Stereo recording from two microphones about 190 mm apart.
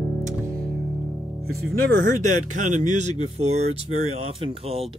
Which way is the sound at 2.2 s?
40° right (ahead or behind).